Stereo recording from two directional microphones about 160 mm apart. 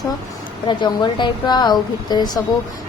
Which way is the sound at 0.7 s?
30° left (ahead or behind).